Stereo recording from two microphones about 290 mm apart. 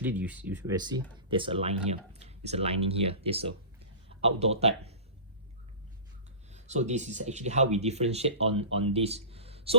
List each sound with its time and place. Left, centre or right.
0.0 s speech: centre; by 4.9 s right
6.5 s speech: right